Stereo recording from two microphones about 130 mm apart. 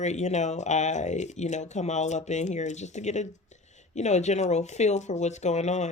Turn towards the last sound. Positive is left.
turn(degrees=60)  # may be behind; listen again after turning